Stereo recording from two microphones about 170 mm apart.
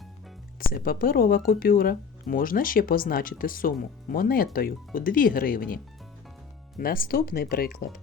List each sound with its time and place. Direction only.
0.7 s speech: 55° left (ahead or behind)